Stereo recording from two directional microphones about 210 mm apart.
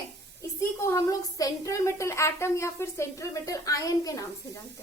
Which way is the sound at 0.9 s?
15° left (ahead or behind).